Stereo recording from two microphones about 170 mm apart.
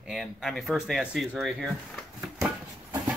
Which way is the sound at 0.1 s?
Centre (ahead or behind).